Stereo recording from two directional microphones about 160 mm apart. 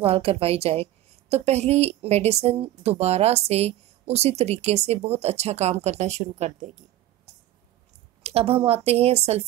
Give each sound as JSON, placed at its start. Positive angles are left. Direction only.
{"t": 0.0, "sound": "a woman's voice", "side_deg": -35}
{"t": 7.3, "sound": "a sound", "side_deg": -45}
{"t": 8.2, "sound": "a woman's voice", "side_deg": -40}